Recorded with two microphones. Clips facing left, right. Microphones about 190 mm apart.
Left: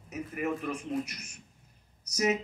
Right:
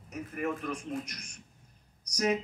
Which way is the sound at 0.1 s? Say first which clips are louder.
Left 1 dB; 5° left (ahead or behind).